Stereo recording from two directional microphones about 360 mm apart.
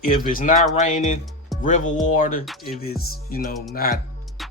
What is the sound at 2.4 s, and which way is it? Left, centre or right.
Speech, centre.